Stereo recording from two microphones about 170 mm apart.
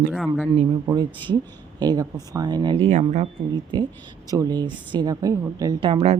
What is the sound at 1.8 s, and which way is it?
Speech, 25° right (ahead or behind).